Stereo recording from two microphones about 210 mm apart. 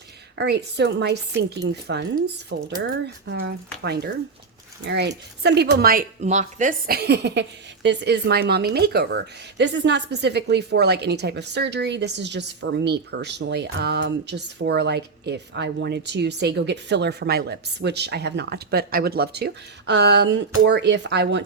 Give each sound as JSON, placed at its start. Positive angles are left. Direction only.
{"t": 0.3, "sound": "speech", "side_deg": -55}
{"t": 4.9, "sound": "speech", "side_deg": -55}